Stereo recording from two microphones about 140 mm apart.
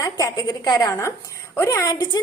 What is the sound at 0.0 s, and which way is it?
A woman's voice, 25° left (ahead or behind).